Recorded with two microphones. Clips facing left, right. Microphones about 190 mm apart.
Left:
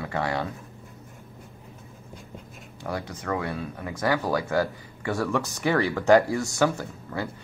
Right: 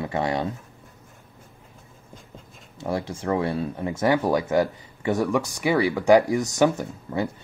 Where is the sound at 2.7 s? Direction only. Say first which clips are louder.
Right 5 dB; 25° right (ahead or behind).